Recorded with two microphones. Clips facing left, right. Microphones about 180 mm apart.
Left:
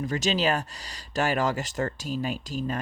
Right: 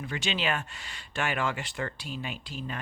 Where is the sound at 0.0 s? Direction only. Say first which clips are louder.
Left 6 dB; 40° left (ahead or behind).